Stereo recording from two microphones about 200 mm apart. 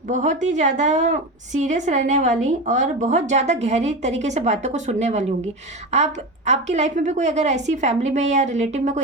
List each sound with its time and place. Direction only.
0.1 s a woman's voice: 35° right (ahead or behind)